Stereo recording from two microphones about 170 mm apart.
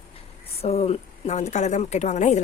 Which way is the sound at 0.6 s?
35° left (ahead or behind).